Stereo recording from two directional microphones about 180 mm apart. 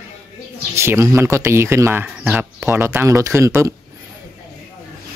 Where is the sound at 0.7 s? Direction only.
15° right (ahead or behind).